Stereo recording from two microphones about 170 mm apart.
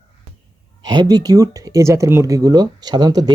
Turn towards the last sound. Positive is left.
turn(degrees=-25)  # may be behind; listen again after turning